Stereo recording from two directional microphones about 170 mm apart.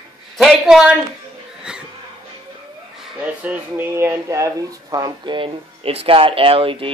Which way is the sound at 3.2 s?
10° right (ahead or behind).